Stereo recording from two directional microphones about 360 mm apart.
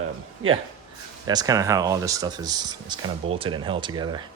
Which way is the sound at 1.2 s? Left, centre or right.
Centre.